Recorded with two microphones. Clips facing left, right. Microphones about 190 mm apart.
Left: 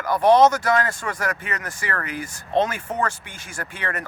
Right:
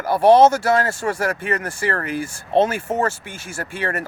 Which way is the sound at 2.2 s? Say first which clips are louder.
Right 4 dB; 10° right (ahead or behind).